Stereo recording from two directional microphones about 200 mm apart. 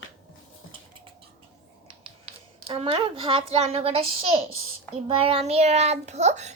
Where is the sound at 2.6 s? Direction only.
30° right (ahead or behind).